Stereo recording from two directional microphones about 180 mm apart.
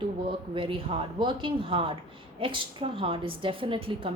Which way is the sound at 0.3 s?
30° right (ahead or behind).